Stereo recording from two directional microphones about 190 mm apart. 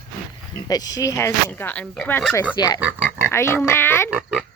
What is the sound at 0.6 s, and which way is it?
Speech, 20° left (ahead or behind).